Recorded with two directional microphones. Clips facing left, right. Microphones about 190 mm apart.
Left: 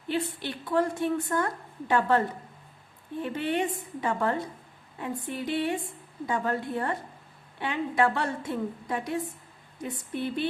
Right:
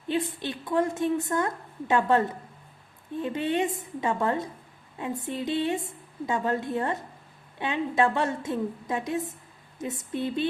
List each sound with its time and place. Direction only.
0.1 s a woman's voice: 20° right (ahead or behind)